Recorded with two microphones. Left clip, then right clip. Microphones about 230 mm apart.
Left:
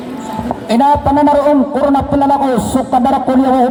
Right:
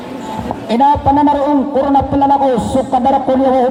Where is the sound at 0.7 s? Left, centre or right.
Left.